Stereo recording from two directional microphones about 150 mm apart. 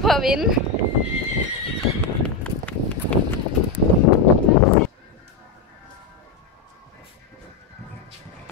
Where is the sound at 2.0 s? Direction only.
10° left (ahead or behind).